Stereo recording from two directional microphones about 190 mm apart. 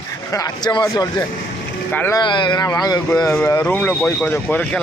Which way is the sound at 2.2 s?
25° left (ahead or behind).